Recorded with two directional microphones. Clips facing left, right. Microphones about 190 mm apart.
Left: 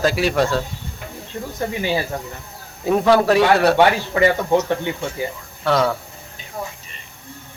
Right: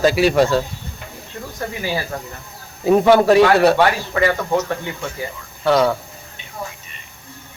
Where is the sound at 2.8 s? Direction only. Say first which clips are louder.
Right 3 dB; 5° right (ahead or behind).